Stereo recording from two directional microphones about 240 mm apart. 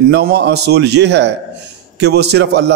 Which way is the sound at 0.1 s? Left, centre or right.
Right.